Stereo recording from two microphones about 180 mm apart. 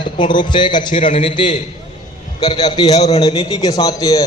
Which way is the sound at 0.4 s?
25° left (ahead or behind).